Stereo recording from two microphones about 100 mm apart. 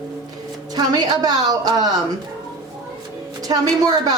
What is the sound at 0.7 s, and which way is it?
Speech, 40° right (ahead or behind).